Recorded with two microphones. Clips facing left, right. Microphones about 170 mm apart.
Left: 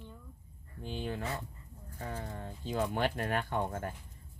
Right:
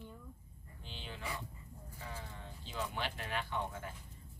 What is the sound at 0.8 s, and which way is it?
Speech, 50° left (ahead or behind).